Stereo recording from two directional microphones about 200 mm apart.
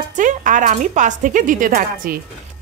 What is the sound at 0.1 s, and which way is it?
Speech, 40° right (ahead or behind).